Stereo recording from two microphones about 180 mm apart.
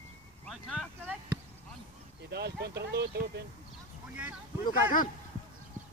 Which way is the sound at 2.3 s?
65° right (ahead or behind).